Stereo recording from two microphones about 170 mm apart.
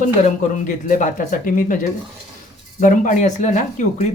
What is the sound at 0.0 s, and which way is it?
Speech, 45° left (ahead or behind).